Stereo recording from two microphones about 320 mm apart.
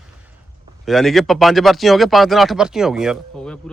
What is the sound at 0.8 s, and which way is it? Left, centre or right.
Speech, centre.